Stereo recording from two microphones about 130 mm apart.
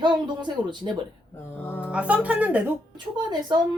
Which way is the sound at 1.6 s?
15° left (ahead or behind).